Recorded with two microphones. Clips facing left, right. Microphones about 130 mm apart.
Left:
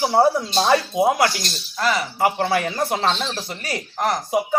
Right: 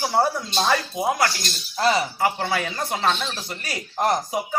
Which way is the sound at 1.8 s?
25° right (ahead or behind).